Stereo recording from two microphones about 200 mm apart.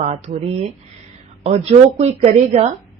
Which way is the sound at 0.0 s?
35° right (ahead or behind).